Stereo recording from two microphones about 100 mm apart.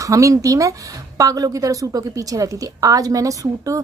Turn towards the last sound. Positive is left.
turn(degrees=-35)  # may be behind; listen again after turning